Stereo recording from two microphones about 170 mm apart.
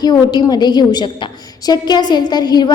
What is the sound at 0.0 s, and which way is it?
A woman's voice, 25° left (ahead or behind).